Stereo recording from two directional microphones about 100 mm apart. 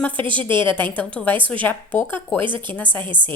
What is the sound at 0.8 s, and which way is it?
A woman's voice, 15° left (ahead or behind).